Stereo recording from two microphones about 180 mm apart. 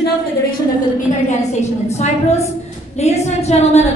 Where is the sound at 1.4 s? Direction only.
40° left (ahead or behind).